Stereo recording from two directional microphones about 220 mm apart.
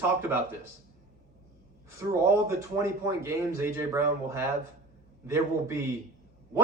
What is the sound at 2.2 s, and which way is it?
A man's voice, 10° right (ahead or behind).